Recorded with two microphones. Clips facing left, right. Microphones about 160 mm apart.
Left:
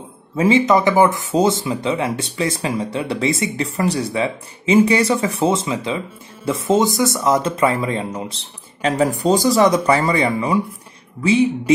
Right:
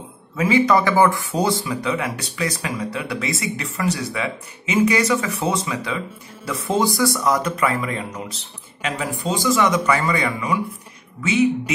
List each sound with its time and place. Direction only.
0.4 s speech: 25° left (ahead or behind)